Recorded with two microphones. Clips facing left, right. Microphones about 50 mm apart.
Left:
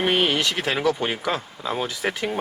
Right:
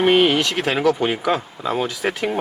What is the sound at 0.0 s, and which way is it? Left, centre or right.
Speech, centre.